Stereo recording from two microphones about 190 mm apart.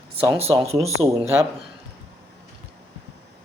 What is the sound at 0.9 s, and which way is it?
Speech, 35° right (ahead or behind).